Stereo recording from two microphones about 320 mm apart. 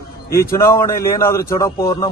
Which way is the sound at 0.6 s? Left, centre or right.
Centre.